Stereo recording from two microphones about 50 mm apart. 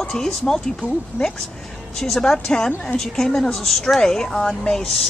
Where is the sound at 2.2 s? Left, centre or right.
Centre.